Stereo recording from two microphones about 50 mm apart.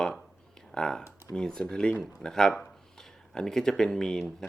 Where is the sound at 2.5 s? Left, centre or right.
Centre.